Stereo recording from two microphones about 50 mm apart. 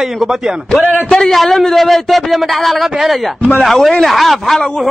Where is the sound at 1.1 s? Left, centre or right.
Centre.